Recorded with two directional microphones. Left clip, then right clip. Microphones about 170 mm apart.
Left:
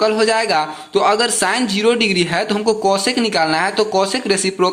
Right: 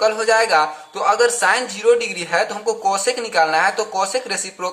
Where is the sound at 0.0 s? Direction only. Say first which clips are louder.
Left 1 dB; 15° left (ahead or behind).